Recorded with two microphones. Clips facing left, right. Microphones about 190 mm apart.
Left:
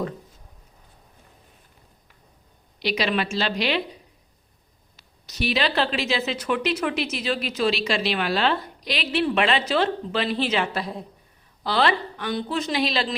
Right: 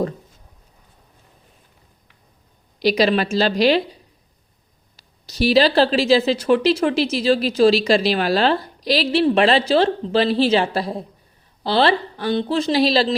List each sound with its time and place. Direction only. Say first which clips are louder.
2.7 s speech: right 7 dB; 40° right (ahead or behind)
4.9 s a woman's voice: right 7 dB; 35° right (ahead or behind)